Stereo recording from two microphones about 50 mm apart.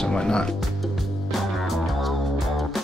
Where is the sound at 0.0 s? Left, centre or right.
Centre.